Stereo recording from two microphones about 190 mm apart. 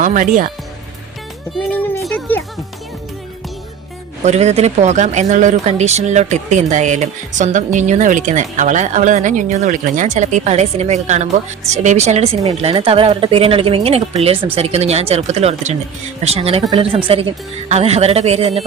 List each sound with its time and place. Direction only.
0.0 s speech: 40° right (ahead or behind)
1.5 s speech: 10° left (ahead or behind)
4.2 s speech: 35° right (ahead or behind)